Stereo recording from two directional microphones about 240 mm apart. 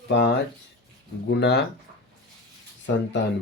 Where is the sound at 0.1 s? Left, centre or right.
Left.